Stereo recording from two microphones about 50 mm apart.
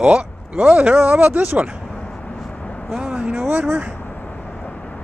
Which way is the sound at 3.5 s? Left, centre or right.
Right.